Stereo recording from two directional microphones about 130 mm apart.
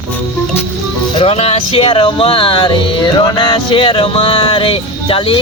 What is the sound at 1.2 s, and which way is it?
Speech, 50° left (ahead or behind).